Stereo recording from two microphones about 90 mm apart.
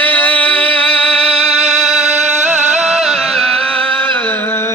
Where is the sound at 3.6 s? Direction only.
15° left (ahead or behind).